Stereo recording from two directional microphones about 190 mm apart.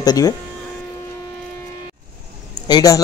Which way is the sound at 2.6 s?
20° left (ahead or behind).